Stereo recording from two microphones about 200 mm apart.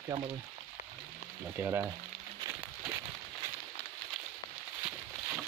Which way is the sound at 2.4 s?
20° right (ahead or behind).